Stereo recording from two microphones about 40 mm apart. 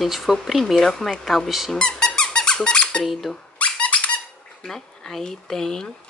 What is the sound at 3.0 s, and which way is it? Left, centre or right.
Speech, centre.